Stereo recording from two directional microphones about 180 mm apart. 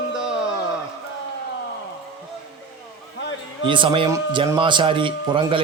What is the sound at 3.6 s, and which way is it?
Speech, 25° right (ahead or behind).